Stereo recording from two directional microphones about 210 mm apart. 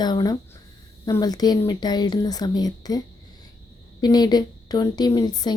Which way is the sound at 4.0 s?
20° left (ahead or behind).